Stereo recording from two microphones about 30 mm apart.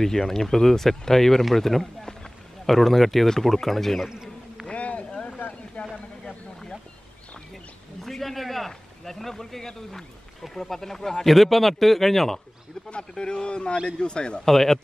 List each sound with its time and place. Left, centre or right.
0.0 s a man's voice: centre
4.6 s a sound: left
5.8 s vehicle: left
7.5 s speech: centre
11.3 s a man's voice: centre
13.2 s speech: left
14.4 s speech: centre